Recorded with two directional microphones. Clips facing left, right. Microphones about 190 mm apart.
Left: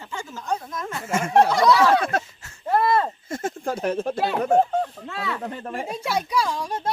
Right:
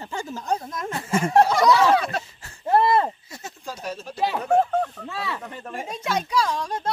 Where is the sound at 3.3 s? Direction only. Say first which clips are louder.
Left 10 dB; 50° left (ahead or behind).